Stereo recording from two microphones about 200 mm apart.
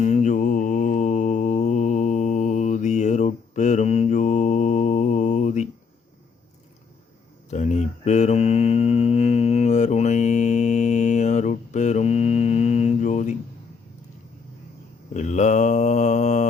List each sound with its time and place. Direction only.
0.0 s mantra: 35° left (ahead or behind)
7.5 s mantra: 35° left (ahead or behind)
15.1 s mantra: 35° left (ahead or behind)